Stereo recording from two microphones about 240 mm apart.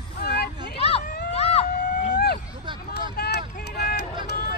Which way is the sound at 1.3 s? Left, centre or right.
Left.